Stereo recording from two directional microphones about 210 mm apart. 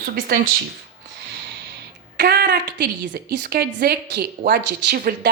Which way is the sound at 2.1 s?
45° right (ahead or behind).